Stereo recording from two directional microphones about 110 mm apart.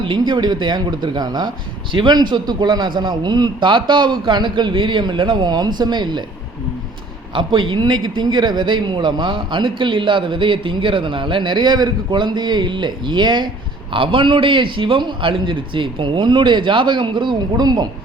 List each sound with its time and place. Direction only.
0.0 s a man's voice: 45° right (ahead or behind)
7.3 s a man's voice: 50° right (ahead or behind)